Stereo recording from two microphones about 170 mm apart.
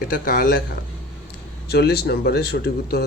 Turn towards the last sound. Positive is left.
turn(degrees=70)  # may be behind; listen again after turning